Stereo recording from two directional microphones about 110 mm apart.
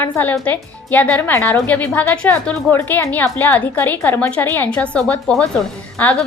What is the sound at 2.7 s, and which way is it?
A woman's voice, 25° left (ahead or behind).